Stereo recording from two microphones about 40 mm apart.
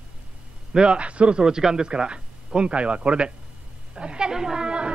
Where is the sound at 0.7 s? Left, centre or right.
Right.